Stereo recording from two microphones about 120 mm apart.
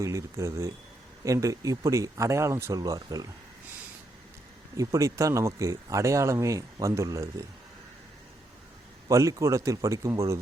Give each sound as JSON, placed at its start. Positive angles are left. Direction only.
{"t": 0.0, "sound": "speech", "side_deg": -25}
{"t": 4.8, "sound": "speech", "side_deg": -25}
{"t": 9.0, "sound": "speech", "side_deg": -25}